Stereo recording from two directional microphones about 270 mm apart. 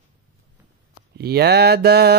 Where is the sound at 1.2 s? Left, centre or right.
Right.